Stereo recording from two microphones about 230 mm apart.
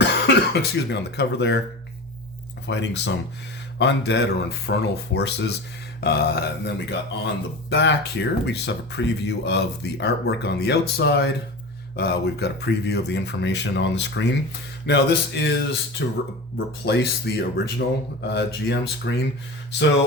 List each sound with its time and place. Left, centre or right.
0.0 s speech: left
2.6 s speech: left